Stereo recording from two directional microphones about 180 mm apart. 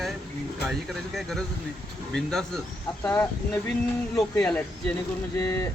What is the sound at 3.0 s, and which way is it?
Speech, 10° left (ahead or behind).